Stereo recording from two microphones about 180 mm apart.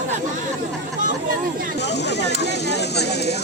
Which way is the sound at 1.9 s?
70° left (ahead or behind).